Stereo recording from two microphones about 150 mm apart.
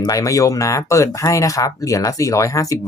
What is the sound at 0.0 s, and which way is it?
Speech, 20° left (ahead or behind).